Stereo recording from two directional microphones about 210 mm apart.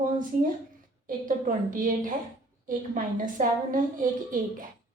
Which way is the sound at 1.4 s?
40° right (ahead or behind).